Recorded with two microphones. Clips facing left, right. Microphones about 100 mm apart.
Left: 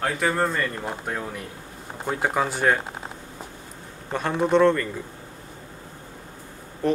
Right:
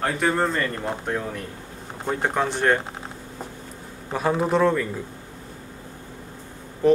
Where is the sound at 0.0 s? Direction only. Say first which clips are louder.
Right 1 dB; centre (ahead or behind).